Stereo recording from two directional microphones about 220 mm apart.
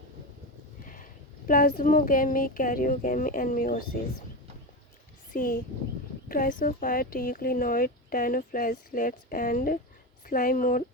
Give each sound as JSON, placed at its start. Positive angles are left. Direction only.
{"t": 0.9, "sound": "speech", "side_deg": 40}
{"t": 5.3, "sound": "speech", "side_deg": 40}